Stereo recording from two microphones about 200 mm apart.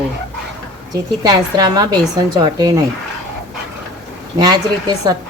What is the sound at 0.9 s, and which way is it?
A woman's voice, 20° right (ahead or behind).